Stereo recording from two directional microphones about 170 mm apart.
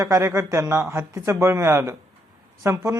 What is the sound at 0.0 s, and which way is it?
Speech, 15° right (ahead or behind).